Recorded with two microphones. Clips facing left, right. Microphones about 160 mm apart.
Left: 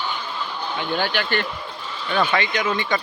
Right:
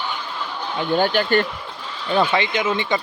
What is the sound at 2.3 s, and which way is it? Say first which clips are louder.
Speech: right 2 dB; 25° right (ahead or behind).